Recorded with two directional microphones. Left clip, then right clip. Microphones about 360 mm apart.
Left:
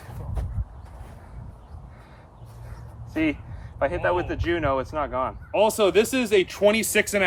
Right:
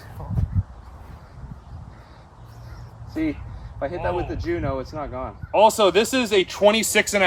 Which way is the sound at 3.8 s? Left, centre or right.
Left.